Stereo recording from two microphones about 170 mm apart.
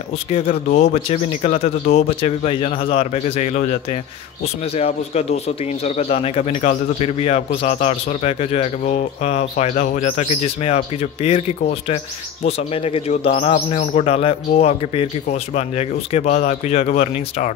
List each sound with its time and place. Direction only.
0.7 s speech: 45° left (ahead or behind)
4.7 s speech: 40° left (ahead or behind)
12.4 s speech: 35° left (ahead or behind)